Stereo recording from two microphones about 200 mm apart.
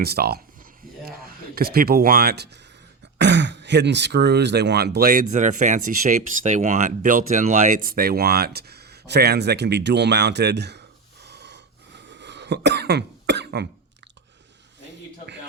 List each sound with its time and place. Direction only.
0.0 s speech: 50° right (ahead or behind)
1.5 s speech: 50° right (ahead or behind)